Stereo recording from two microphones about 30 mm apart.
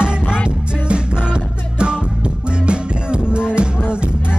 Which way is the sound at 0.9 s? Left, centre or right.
Right.